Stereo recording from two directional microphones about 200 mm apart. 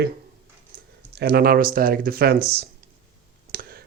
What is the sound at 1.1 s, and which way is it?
Speech, 55° right (ahead or behind).